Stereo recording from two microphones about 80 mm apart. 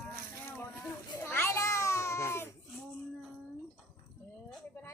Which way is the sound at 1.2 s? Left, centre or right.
Left.